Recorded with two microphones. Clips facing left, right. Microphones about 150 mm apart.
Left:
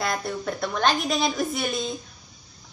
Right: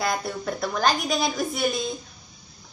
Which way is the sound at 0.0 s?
Centre (ahead or behind).